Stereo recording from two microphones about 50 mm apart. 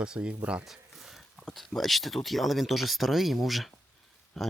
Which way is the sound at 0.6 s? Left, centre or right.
Centre.